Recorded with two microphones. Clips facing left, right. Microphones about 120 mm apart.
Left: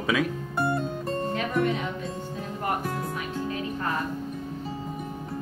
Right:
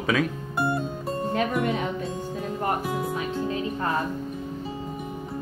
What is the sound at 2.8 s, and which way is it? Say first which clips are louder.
Music: right 3 dB; 5° right (ahead or behind).